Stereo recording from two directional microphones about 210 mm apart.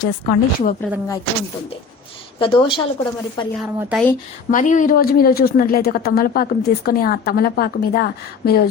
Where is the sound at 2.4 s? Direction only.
25° left (ahead or behind).